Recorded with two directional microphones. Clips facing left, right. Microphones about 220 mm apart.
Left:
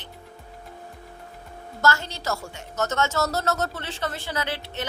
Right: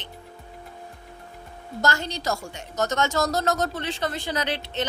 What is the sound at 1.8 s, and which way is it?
A woman's voice, 15° right (ahead or behind).